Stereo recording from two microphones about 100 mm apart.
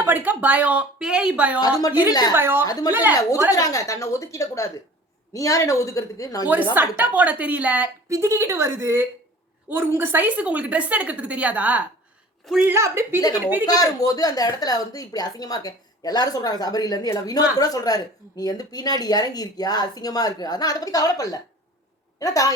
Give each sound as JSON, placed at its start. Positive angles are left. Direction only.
{"t": 0.0, "sound": "a woman's voice", "side_deg": -20}
{"t": 1.5, "sound": "speech", "side_deg": 40}
{"t": 2.3, "sound": "a woman's voice", "side_deg": -20}
{"t": 3.2, "sound": "speech", "side_deg": 35}
{"t": 6.7, "sound": "a woman's voice", "side_deg": -20}
{"t": 8.1, "sound": "a woman's voice", "side_deg": -30}
{"t": 12.6, "sound": "a woman's voice", "side_deg": -25}
{"t": 13.1, "sound": "speech", "side_deg": 40}
{"t": 13.4, "sound": "a woman's voice", "side_deg": -20}
{"t": 13.7, "sound": "speech", "side_deg": 40}